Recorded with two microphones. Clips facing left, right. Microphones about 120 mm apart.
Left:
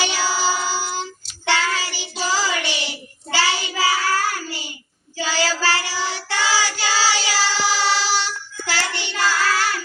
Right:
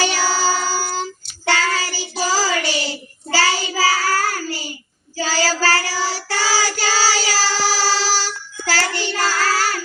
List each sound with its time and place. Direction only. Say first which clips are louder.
0.0 s child singing: right 3 dB; 40° right (ahead or behind)
0.7 s a sound: right 2 dB; 40° right (ahead or behind)
1.5 s child singing: right 2 dB; 40° right (ahead or behind)